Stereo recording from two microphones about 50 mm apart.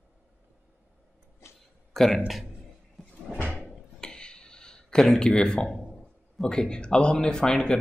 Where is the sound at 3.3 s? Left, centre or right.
Centre.